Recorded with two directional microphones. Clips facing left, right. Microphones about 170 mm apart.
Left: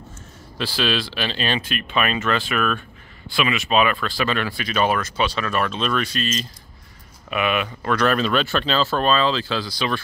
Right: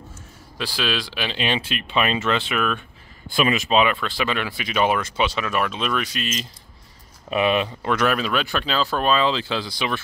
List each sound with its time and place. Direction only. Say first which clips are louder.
0.6 s speech: left 3 dB; 10° right (ahead or behind)
3.3 s speech: right 2 dB; 40° right (ahead or behind)
3.7 s speech: left 2 dB; 20° right (ahead or behind)
7.2 s speech: right 2 dB; 30° right (ahead or behind)
8.0 s speech: left 3 dB; 5° right (ahead or behind)